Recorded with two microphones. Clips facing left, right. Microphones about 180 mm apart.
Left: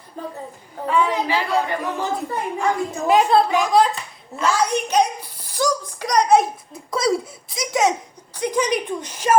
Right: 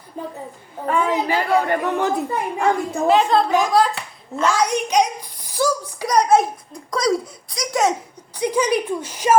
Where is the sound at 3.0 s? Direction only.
10° left (ahead or behind).